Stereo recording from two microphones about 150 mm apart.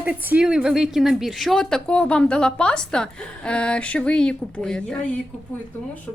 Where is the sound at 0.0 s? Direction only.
10° right (ahead or behind); by 5.0 s 5° left (ahead or behind).